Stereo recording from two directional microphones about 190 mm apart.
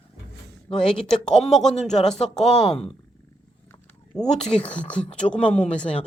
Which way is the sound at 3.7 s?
10° left (ahead or behind).